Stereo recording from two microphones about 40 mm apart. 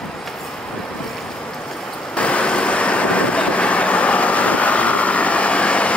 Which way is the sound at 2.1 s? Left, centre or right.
Left.